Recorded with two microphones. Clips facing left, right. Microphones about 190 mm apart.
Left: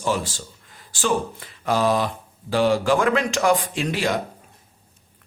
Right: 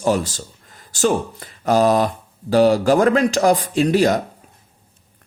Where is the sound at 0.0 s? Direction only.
40° right (ahead or behind).